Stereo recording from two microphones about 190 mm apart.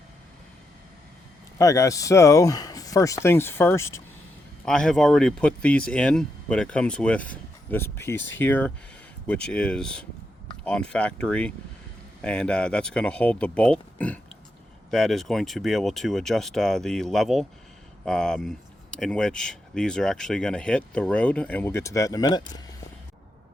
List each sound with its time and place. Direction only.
1.5 s speech: 15° left (ahead or behind)
4.6 s speech: 5° left (ahead or behind); by 22.6 s 20° left (ahead or behind)